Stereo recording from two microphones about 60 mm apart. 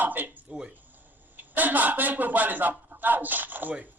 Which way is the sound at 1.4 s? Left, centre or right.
Right.